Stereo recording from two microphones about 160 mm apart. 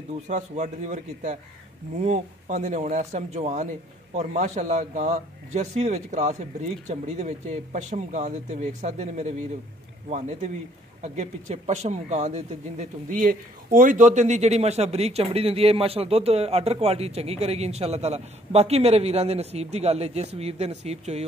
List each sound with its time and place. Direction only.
0.3 s speech: 50° right (ahead or behind)